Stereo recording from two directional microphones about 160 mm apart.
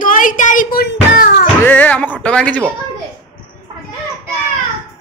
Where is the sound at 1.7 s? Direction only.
10° left (ahead or behind).